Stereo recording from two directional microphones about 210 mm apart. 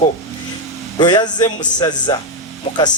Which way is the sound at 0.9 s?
20° left (ahead or behind).